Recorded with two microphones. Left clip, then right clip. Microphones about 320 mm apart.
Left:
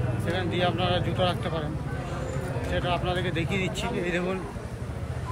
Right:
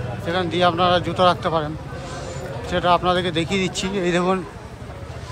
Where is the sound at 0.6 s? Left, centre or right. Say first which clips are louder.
Right 10 dB; centre.